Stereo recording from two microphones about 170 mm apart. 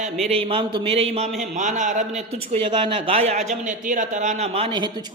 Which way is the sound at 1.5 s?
45° right (ahead or behind).